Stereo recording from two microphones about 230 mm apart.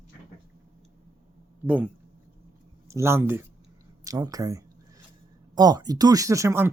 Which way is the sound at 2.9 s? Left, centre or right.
Centre.